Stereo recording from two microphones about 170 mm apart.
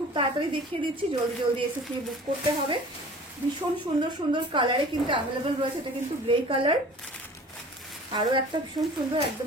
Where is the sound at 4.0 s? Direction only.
25° right (ahead or behind).